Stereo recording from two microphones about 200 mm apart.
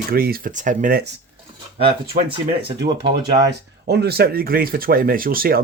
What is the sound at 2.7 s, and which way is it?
Speech, 60° right (ahead or behind).